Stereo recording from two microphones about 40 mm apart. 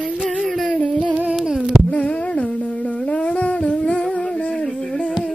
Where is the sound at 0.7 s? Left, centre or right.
Left.